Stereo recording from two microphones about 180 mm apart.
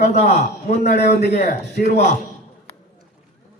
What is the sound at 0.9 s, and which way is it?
Speech, 65° left (ahead or behind).